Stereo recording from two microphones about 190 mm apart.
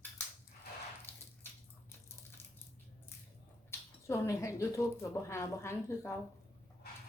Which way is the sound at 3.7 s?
15° left (ahead or behind).